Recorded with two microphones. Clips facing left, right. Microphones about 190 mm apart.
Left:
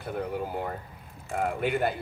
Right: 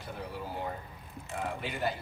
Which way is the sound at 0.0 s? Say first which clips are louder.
Left 8 dB; 55° left (ahead or behind).